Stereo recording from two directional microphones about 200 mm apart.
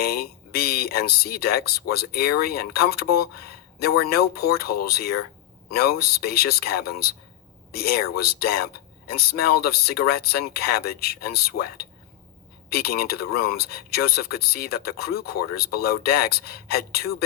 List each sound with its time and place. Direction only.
0.0 s speech: 50° left (ahead or behind)